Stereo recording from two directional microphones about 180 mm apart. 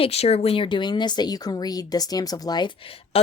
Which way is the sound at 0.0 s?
35° left (ahead or behind).